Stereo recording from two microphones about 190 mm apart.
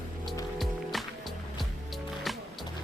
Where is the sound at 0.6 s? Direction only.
Centre (ahead or behind).